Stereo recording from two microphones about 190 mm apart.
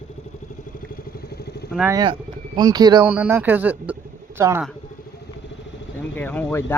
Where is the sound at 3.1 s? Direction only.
10° right (ahead or behind).